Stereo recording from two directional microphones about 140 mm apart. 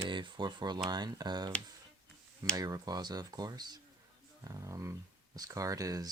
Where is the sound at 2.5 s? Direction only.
25° right (ahead or behind).